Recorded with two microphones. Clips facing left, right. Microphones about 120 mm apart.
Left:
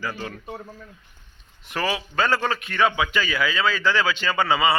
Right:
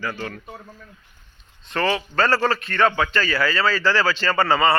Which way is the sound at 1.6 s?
5° left (ahead or behind).